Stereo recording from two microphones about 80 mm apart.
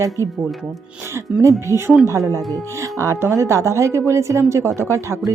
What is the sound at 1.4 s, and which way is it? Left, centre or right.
Speech, right.